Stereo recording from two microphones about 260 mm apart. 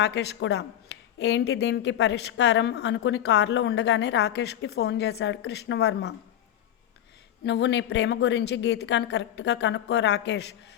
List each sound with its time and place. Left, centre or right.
0.0 s speech: left
7.4 s speech: left